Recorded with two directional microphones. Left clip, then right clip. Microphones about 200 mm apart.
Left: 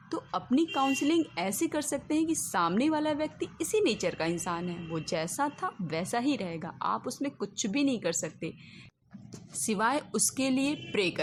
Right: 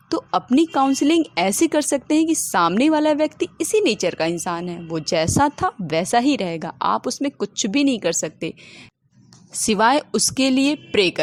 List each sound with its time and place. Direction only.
0.1 s a woman's voice: 40° right (ahead or behind)
9.6 s a woman's voice: 40° right (ahead or behind)